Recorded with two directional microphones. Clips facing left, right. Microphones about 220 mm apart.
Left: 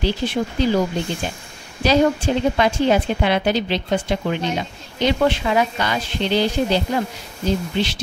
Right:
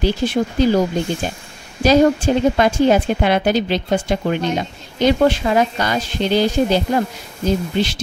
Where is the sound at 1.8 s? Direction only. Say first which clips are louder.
Right 4 dB; 45° right (ahead or behind).